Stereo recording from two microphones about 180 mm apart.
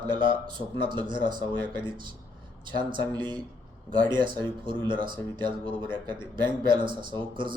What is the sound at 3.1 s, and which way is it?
Speech, 25° right (ahead or behind).